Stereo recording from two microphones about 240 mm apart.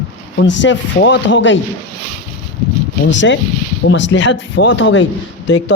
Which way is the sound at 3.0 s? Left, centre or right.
Left.